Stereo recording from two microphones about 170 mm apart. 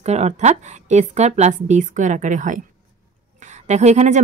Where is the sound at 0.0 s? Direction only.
40° right (ahead or behind).